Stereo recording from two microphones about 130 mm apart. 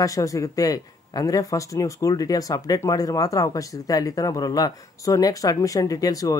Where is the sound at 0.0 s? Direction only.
25° left (ahead or behind).